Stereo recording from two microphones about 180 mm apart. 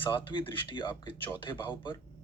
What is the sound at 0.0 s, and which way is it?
Speech, 30° left (ahead or behind).